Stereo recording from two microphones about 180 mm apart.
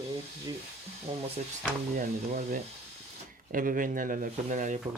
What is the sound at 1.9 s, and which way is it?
Speech, 45° right (ahead or behind).